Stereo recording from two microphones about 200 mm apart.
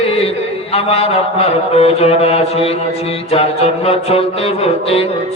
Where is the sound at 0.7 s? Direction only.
30° left (ahead or behind).